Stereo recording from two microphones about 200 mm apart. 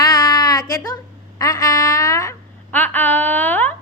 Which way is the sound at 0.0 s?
20° left (ahead or behind).